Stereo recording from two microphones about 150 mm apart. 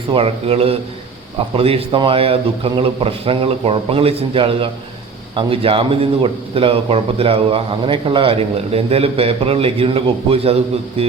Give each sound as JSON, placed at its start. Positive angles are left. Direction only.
{"t": 0.1, "sound": "speech", "side_deg": -40}